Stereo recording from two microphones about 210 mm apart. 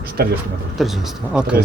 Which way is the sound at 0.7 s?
Centre (ahead or behind).